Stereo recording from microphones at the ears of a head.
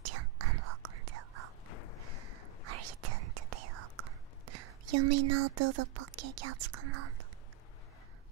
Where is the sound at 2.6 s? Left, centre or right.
Right.